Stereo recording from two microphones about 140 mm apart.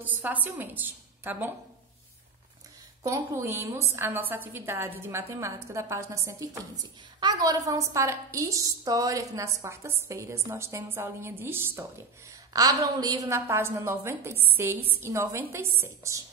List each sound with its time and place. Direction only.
0.0 s a woman's voice: 10° right (ahead or behind)
3.0 s a woman's voice: 20° right (ahead or behind)
12.5 s a woman's voice: 25° right (ahead or behind)